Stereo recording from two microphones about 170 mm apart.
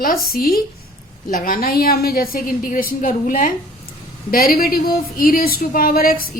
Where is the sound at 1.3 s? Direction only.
55° left (ahead or behind).